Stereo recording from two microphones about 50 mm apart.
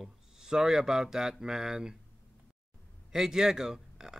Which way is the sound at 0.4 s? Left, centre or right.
Centre.